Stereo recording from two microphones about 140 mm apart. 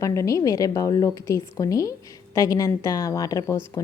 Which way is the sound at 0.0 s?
20° left (ahead or behind).